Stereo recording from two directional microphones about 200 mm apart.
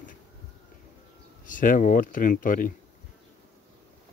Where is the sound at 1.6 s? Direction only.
40° left (ahead or behind).